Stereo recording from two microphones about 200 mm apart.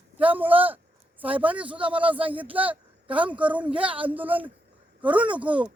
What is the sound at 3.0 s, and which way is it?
Speech, 25° right (ahead or behind).